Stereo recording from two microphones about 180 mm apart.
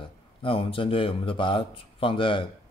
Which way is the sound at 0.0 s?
30° left (ahead or behind).